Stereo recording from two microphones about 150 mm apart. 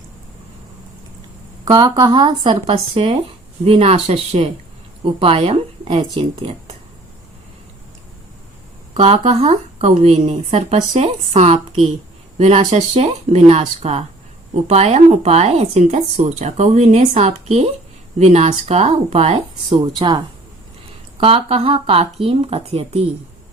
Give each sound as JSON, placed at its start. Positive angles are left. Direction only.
{"t": 1.6, "sound": "a woman's voice", "side_deg": -25}
{"t": 9.0, "sound": "speech", "side_deg": -45}
{"t": 19.8, "sound": "speech", "side_deg": -30}